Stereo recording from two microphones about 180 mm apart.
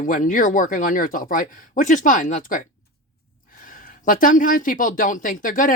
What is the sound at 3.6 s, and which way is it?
Speech, 50° left (ahead or behind).